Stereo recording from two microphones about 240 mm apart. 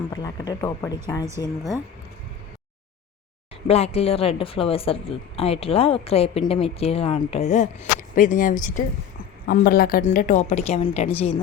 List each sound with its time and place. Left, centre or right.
0.1 s speech: centre
3.7 s a woman's voice: left